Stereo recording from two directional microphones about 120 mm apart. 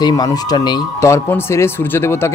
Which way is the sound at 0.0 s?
35° left (ahead or behind).